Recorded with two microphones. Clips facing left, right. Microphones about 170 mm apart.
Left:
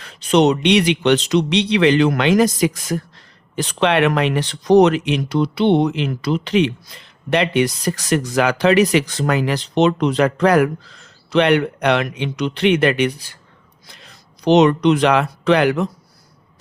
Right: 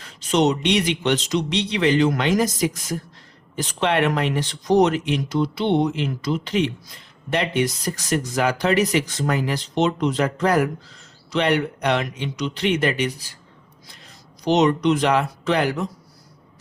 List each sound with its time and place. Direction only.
0.0 s speech: 65° left (ahead or behind)